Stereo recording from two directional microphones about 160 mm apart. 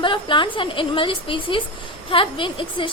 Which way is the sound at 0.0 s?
30° left (ahead or behind).